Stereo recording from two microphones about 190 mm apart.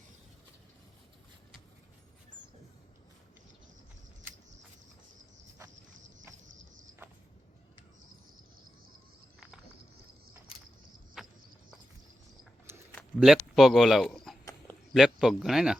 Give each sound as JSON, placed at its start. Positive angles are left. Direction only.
{"t": 11.2, "sound": "cricket", "side_deg": -5}
{"t": 12.7, "sound": "a sound", "side_deg": -15}
{"t": 13.1, "sound": "speech", "side_deg": 0}